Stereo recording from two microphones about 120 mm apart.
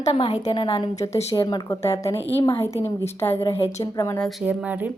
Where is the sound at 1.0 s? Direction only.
25° left (ahead or behind).